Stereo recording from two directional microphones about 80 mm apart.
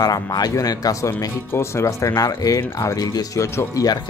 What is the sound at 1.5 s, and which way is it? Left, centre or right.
Speech, left.